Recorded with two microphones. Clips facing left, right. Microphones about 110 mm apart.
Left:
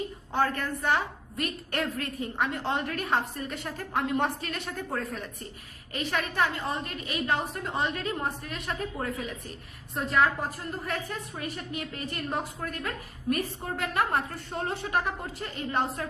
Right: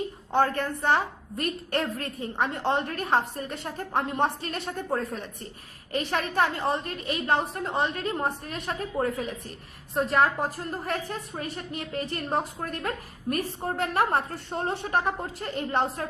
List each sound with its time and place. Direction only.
0.3 s a woman's voice: 30° right (ahead or behind)